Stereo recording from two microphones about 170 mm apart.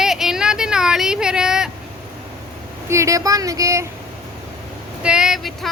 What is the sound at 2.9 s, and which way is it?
Speech, 20° right (ahead or behind).